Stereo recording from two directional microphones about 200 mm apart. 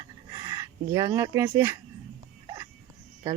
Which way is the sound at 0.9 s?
15° right (ahead or behind).